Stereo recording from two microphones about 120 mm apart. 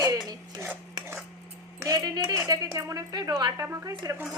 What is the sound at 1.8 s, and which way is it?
Speech, 30° right (ahead or behind).